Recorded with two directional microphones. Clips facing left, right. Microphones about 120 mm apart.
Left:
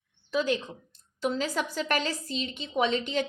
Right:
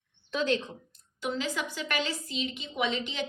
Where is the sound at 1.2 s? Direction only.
40° left (ahead or behind).